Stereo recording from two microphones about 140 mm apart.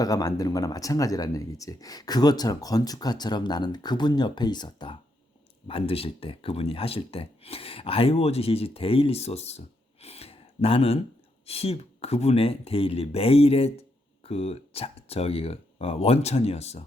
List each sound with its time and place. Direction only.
0.0 s speech: 25° left (ahead or behind); by 16.8 s 50° left (ahead or behind)